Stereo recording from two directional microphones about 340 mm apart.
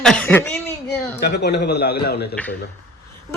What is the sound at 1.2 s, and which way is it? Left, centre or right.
A man's voice, left.